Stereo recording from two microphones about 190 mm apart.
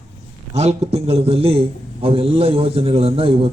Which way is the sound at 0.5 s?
35° right (ahead or behind).